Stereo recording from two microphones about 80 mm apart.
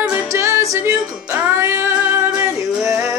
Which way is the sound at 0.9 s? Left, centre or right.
Right.